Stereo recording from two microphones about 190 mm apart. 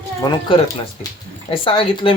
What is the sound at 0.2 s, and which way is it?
Speech, 25° left (ahead or behind).